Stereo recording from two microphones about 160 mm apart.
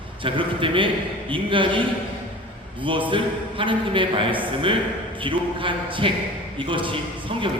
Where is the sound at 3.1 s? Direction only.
30° right (ahead or behind).